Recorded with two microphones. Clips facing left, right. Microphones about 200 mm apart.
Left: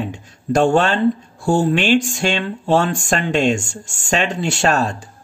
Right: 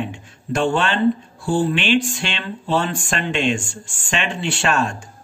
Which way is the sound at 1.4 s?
45° left (ahead or behind).